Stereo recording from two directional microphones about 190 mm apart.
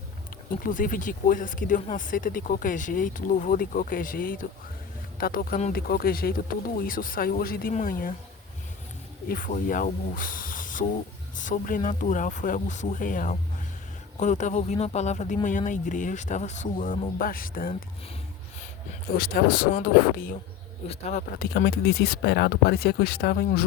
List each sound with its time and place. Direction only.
0.6 s speech: 45° left (ahead or behind)
9.3 s speech: 45° left (ahead or behind)
19.1 s speech: 50° left (ahead or behind)
20.8 s speech: 35° left (ahead or behind); by 23.6 s 55° left (ahead or behind)